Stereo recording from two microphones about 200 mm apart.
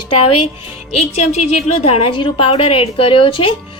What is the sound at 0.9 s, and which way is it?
A woman's voice, 30° left (ahead or behind).